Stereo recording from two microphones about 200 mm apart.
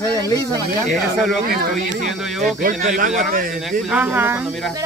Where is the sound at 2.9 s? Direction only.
40° right (ahead or behind).